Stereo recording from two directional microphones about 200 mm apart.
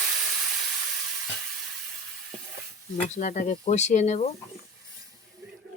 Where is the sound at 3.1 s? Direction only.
40° left (ahead or behind).